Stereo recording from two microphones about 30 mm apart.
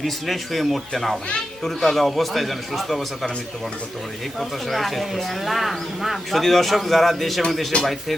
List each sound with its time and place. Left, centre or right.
0.0 s speech: centre
4.4 s speech: centre
7.7 s speech: left